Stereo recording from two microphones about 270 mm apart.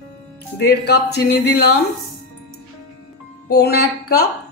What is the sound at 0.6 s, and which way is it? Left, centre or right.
Speech, left.